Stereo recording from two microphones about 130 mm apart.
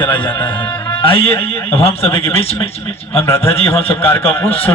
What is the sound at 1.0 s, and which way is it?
Speech, 45° left (ahead or behind).